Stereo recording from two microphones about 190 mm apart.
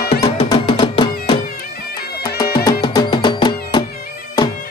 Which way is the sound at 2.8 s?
25° left (ahead or behind).